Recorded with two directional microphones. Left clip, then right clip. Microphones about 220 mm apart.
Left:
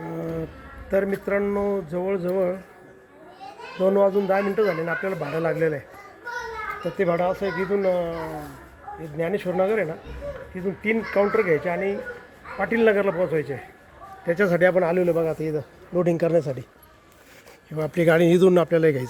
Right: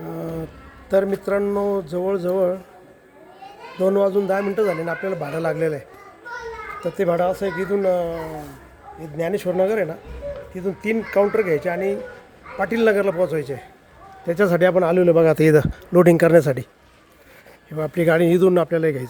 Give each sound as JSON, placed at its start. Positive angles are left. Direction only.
{"t": 0.9, "sound": "speech", "side_deg": -10}
{"t": 3.8, "sound": "speech", "side_deg": -15}
{"t": 7.0, "sound": "speech", "side_deg": -20}
{"t": 15.9, "sound": "speech", "side_deg": -35}
{"t": 17.7, "sound": "speech", "side_deg": -5}